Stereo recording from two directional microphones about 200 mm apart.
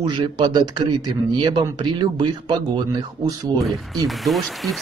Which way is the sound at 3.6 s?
Centre (ahead or behind).